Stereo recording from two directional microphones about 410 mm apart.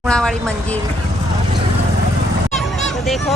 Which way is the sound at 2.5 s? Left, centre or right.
Centre.